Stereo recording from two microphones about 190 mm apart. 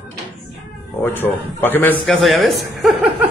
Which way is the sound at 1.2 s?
10° left (ahead or behind).